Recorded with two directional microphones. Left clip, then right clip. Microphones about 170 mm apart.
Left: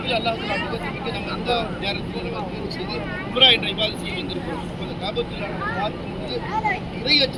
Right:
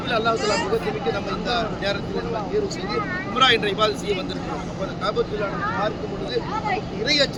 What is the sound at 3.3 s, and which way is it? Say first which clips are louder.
Speech: left 2 dB; 20° right (ahead or behind).